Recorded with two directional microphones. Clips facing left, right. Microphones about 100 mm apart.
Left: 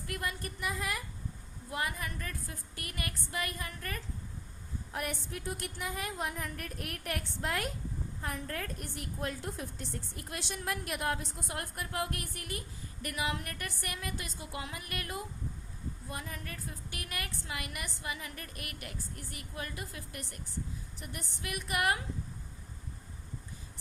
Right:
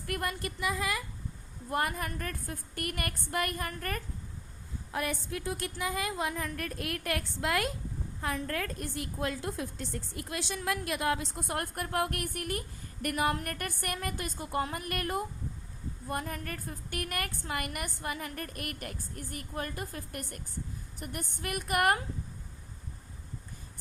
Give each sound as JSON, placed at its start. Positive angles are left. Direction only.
{"t": 0.1, "sound": "a woman's voice", "side_deg": -55}
{"t": 0.4, "sound": "a woman's voice", "side_deg": -90}
{"t": 1.7, "sound": "a woman's voice", "side_deg": -50}
{"t": 5.3, "sound": "a woman's voice", "side_deg": -90}
{"t": 11.4, "sound": "a woman's voice", "side_deg": -55}